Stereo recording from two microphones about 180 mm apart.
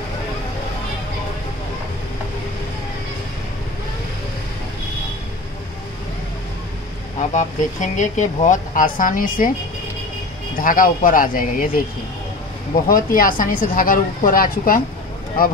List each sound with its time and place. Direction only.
7.3 s speech: 40° left (ahead or behind)
10.6 s speech: 50° left (ahead or behind)
12.8 s speech: 50° left (ahead or behind)